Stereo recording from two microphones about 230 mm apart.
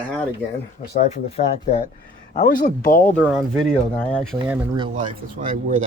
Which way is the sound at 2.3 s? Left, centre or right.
Left.